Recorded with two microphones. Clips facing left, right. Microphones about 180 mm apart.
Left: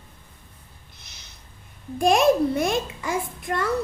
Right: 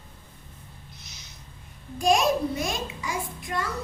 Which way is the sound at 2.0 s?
55° left (ahead or behind).